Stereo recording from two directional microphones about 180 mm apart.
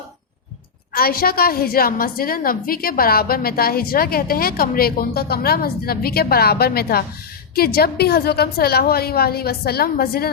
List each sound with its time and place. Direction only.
0.9 s a woman's voice: 55° left (ahead or behind)